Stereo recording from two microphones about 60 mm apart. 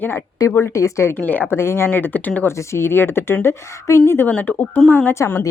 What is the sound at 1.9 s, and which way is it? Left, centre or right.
Speech, left.